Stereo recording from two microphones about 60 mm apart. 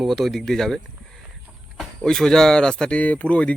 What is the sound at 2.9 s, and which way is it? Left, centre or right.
Speech, left.